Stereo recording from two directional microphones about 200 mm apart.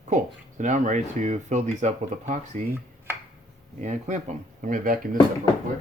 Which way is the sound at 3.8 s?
35° right (ahead or behind).